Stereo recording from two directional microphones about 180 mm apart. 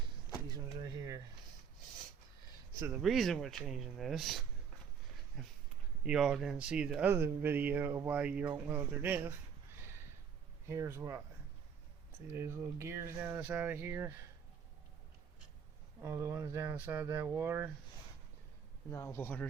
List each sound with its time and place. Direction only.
0.5 s door: 20° right (ahead or behind)
3.0 s speech: centre (ahead or behind)
10.7 s speech: 15° right (ahead or behind)
12.3 s speech: 15° right (ahead or behind)
16.0 s speech: 15° right (ahead or behind)
18.9 s speech: 15° left (ahead or behind)